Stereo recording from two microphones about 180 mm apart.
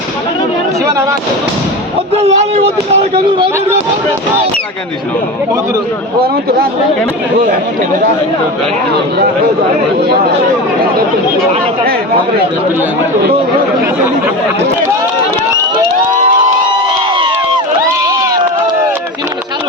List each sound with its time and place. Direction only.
2.2 s speech: 35° right (ahead or behind)